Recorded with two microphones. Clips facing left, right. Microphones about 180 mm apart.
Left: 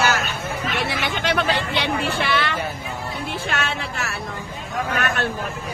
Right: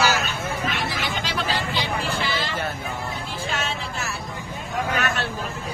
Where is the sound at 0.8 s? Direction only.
65° left (ahead or behind).